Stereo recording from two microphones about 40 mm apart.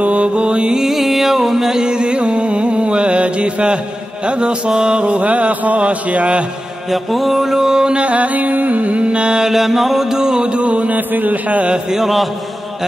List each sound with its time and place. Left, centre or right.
0.0 s music: right
0.7 s music: centre
1.8 s music: right
4.3 s mantra: right
6.9 s music: centre
8.0 s mantra: right
9.5 s music: centre; by 11.0 s right
11.0 s a sound: right
11.9 s music: centre